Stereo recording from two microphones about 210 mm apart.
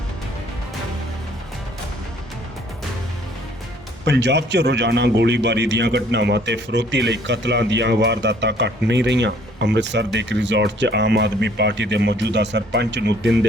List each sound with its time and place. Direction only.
4.0 s a man's voice: 55° right (ahead or behind)